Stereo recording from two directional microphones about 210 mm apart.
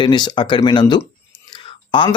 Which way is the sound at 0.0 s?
20° left (ahead or behind).